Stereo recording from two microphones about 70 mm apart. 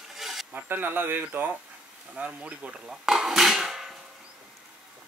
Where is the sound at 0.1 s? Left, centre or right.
Centre.